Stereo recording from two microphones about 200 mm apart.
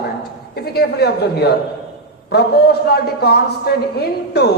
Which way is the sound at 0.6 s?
50° left (ahead or behind).